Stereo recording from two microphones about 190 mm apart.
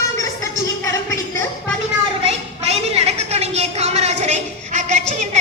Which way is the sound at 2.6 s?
35° right (ahead or behind).